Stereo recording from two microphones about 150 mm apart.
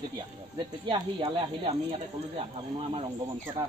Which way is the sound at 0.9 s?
35° right (ahead or behind).